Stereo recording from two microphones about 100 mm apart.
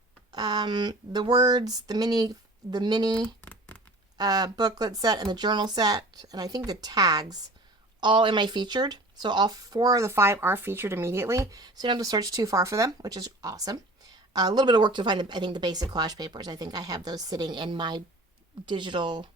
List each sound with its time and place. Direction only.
0.3 s speech: 50° right (ahead or behind)
3.2 s a sound: 15° left (ahead or behind)
4.2 s speech: 40° right (ahead or behind)
8.0 s speech: 55° right (ahead or behind)